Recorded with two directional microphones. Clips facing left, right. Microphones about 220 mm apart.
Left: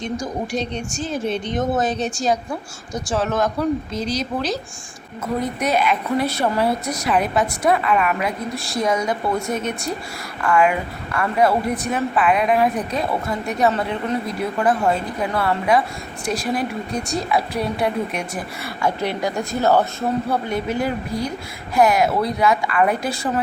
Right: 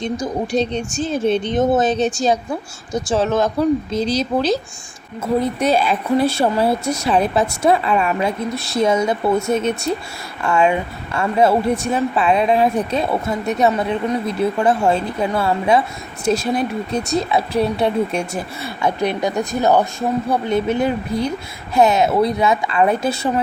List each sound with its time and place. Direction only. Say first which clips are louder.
0.0 s speech: right 3 dB; 25° right (ahead or behind)